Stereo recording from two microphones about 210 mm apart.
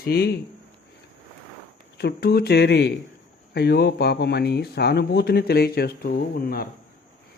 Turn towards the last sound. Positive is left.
turn(degrees=45)  # may be behind; listen again after turning